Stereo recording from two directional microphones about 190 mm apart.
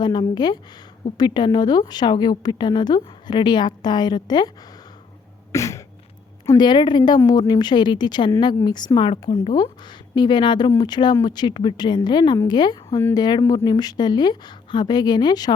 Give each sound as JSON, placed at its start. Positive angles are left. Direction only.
{"t": 0.0, "sound": "a woman's voice", "side_deg": 20}
{"t": 5.5, "sound": "a sound", "side_deg": 15}
{"t": 6.4, "sound": "a woman's voice", "side_deg": 20}
{"t": 9.3, "sound": "speech", "side_deg": 35}
{"t": 10.2, "sound": "a woman's voice", "side_deg": 25}